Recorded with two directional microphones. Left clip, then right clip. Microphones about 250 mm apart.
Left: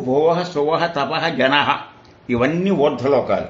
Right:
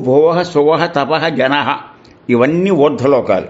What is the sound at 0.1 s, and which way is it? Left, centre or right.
Speech, right.